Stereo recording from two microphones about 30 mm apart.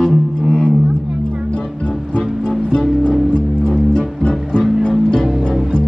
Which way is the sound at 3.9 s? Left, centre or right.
Left.